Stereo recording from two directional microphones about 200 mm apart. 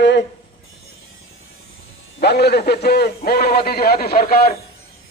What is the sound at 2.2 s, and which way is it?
A man's voice, 55° left (ahead or behind).